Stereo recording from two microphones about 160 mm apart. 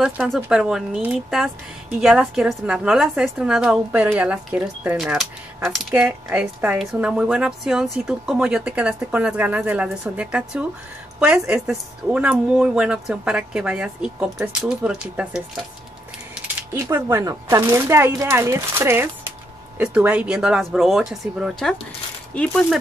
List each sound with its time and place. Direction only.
0.0 s a woman's voice: 5° right (ahead or behind)